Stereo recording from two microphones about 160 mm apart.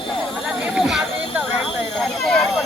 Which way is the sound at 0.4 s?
5° right (ahead or behind).